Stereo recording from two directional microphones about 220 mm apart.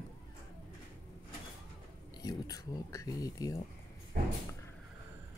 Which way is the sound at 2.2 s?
15° left (ahead or behind).